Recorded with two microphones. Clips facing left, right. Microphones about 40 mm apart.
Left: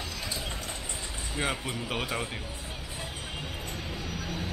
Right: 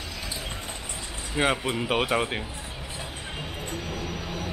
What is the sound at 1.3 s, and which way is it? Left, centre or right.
Speech, right.